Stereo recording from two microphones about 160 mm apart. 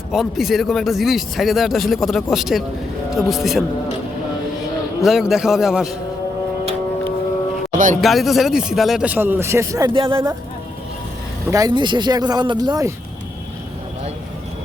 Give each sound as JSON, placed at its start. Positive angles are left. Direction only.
{"t": 0.1, "sound": "speech", "side_deg": 0}
{"t": 5.0, "sound": "speech", "side_deg": 0}
{"t": 7.7, "sound": "speech", "side_deg": -55}
{"t": 8.0, "sound": "speech", "side_deg": 0}
{"t": 11.4, "sound": "speech", "side_deg": -20}